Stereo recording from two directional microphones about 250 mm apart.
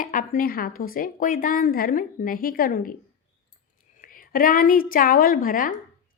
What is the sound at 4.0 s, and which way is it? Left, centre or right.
A woman's voice, left.